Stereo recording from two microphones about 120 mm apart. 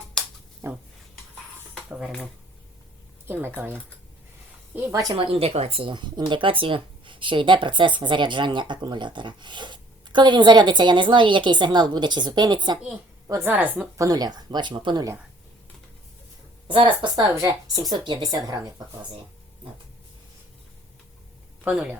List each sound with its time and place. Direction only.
0.6 s speech: 25° right (ahead or behind)
1.9 s speech: 5° right (ahead or behind)
3.2 s a woman's voice: 15° right (ahead or behind)
5.1 s speech: 50° right (ahead or behind); by 12.8 s 35° right (ahead or behind)
13.2 s a woman's voice: 20° right (ahead or behind)
13.9 s speech: 30° right (ahead or behind)
16.6 s a woman's voice: 45° right (ahead or behind)
17.3 s speech: 30° right (ahead or behind)
21.6 s speech: 10° right (ahead or behind)